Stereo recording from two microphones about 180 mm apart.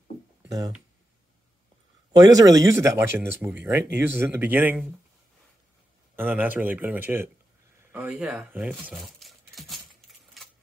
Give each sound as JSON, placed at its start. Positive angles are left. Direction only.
{"t": 0.4, "sound": "speech", "side_deg": -20}
{"t": 2.1, "sound": "speech", "side_deg": -20}
{"t": 6.1, "sound": "speech", "side_deg": -10}
{"t": 10.4, "sound": "typewriter", "side_deg": 0}